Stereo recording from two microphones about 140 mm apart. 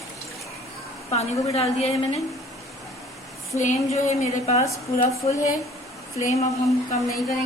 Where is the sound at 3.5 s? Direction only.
55° left (ahead or behind).